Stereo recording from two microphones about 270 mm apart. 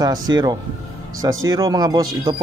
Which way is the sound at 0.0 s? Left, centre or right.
Centre.